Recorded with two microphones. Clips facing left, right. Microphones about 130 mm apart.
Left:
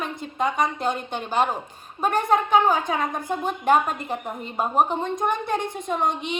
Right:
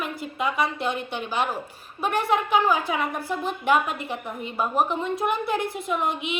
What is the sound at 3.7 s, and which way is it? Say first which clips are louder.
A woman's voice: left 2 dB; 45° left (ahead or behind).